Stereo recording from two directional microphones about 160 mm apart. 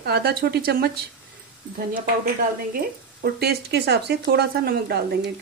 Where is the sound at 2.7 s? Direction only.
80° right.